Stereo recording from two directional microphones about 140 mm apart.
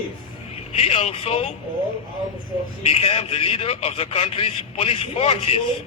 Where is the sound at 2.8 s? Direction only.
45° left (ahead or behind).